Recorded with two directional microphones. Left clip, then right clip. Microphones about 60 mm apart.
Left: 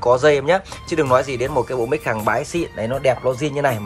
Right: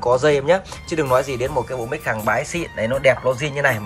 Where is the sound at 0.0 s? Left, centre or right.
Right.